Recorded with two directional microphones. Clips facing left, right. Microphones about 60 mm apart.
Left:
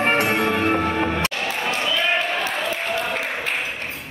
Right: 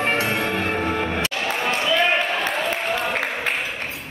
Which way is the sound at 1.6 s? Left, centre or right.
Right.